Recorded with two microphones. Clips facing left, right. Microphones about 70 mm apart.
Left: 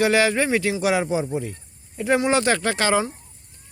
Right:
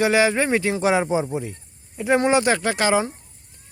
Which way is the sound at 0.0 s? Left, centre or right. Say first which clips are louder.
Right 1 dB; right.